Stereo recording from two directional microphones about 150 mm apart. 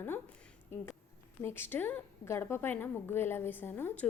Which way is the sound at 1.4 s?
15° left (ahead or behind).